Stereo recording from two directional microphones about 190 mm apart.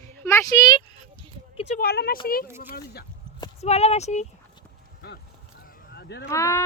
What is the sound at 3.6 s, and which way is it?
Speech, 35° left (ahead or behind).